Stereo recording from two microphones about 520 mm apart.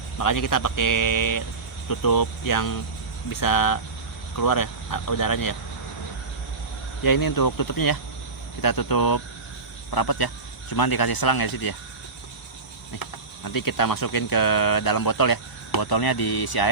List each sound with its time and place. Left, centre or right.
0.2 s speech: left
7.0 s speech: left
13.0 s speech: left